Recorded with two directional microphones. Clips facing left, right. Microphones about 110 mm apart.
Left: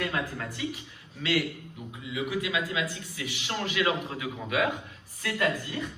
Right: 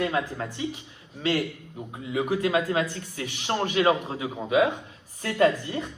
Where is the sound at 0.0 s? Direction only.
25° right (ahead or behind).